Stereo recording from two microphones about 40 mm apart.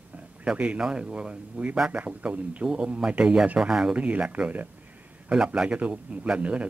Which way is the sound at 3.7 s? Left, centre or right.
Centre.